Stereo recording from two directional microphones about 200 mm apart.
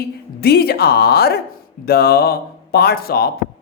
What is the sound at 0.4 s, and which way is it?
A woman's voice, 50° left (ahead or behind).